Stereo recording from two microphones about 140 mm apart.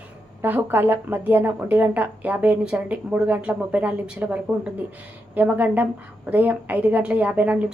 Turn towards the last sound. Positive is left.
turn(degrees=-10)  # may be behind; listen again after turning